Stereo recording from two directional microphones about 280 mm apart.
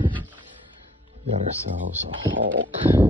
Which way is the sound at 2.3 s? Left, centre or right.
Right.